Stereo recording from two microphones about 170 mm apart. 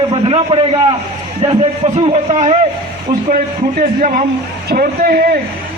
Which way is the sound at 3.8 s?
50° right (ahead or behind).